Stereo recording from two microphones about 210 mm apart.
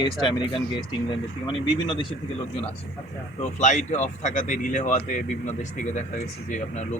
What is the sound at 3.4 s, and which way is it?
Speech, 35° left (ahead or behind).